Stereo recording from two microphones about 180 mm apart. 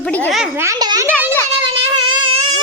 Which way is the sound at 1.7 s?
30° right (ahead or behind).